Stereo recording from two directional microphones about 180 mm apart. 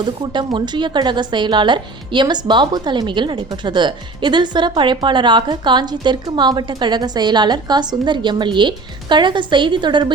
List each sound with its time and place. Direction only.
0.0 s a woman's voice: 25° right (ahead or behind)